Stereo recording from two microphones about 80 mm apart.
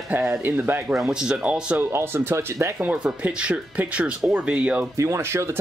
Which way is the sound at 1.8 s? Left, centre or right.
Right.